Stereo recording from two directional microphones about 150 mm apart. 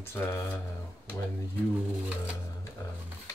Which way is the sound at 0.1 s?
15° left (ahead or behind).